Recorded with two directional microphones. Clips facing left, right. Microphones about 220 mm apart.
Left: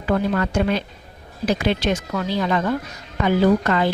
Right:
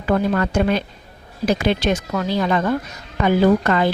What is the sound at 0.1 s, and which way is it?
Speech, 50° right (ahead or behind).